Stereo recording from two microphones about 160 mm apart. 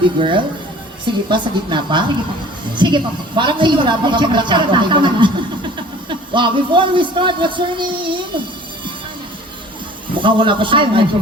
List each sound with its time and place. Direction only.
0.2 s a man's voice: 30° right (ahead or behind)
10.2 s a man's voice: 30° right (ahead or behind)